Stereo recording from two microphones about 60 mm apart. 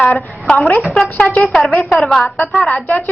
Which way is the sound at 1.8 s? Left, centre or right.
Centre.